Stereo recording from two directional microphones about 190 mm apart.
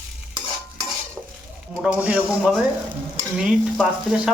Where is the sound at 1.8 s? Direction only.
5° right (ahead or behind).